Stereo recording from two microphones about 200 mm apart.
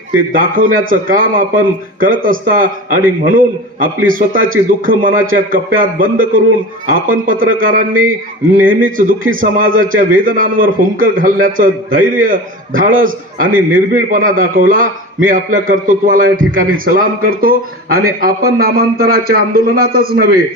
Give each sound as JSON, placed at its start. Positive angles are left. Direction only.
{"t": 0.1, "sound": "a man's voice", "side_deg": -45}